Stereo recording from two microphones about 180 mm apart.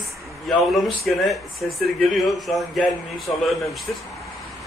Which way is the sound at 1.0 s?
Centre (ahead or behind).